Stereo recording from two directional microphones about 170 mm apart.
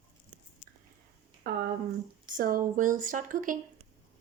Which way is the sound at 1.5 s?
55° right (ahead or behind).